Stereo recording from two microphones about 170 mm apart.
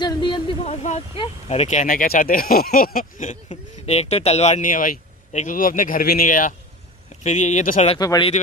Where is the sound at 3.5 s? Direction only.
40° left (ahead or behind).